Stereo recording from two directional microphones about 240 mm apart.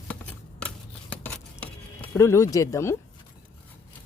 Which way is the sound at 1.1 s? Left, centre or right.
Centre.